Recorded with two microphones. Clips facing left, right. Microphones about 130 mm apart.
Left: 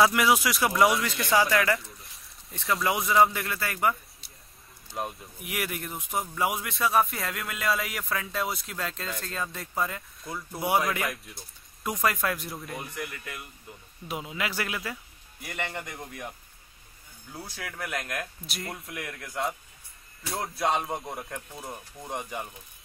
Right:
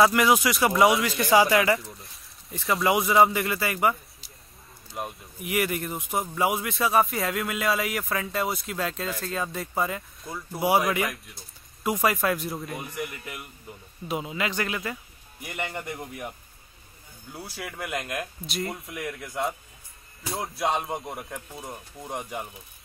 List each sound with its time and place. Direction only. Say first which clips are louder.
0.0 s speech: right 2 dB; centre (ahead or behind)
13.0 s speech: right 3 dB; 15° right (ahead or behind)
14.0 s speech: right 4 dB; centre (ahead or behind)
15.4 s speech: right 2 dB; 15° right (ahead or behind)
18.5 s speech: right 5 dB; centre (ahead or behind)